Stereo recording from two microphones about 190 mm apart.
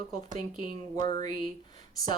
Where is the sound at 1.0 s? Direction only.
20° left (ahead or behind).